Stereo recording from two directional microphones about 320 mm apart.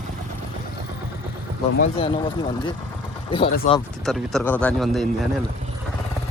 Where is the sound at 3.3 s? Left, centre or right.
Centre.